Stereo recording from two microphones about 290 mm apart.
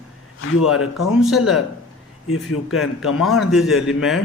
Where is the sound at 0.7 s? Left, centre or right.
Left.